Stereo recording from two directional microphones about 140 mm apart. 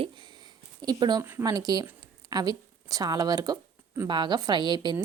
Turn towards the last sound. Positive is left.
turn(degrees=-30)  # may be behind; listen again after turning